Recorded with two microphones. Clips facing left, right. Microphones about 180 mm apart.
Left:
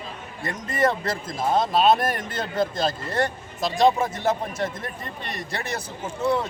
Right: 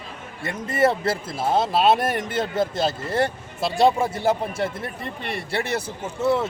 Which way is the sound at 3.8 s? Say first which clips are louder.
Right 1 dB; 10° right (ahead or behind).